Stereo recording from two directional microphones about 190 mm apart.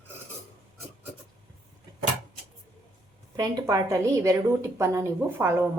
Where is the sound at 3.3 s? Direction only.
20° right (ahead or behind).